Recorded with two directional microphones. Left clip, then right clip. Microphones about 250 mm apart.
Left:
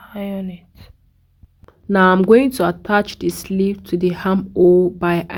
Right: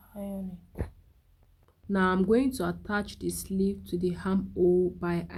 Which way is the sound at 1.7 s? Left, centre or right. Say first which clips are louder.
Left 14 dB; left.